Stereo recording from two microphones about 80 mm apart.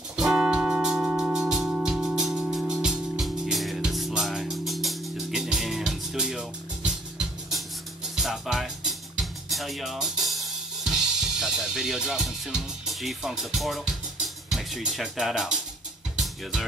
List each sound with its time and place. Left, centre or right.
0.1 s music: centre
14.5 s speech: centre